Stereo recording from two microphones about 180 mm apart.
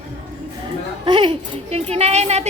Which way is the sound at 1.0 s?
25° right (ahead or behind).